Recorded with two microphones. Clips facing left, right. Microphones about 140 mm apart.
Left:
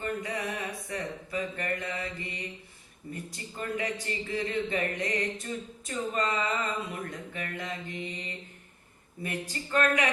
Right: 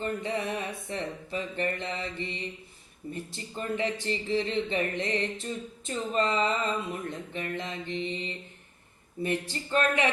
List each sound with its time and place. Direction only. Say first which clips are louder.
0.0 s speech: right 2 dB; 25° right (ahead or behind)